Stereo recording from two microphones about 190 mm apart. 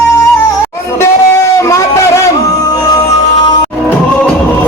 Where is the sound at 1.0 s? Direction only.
15° left (ahead or behind).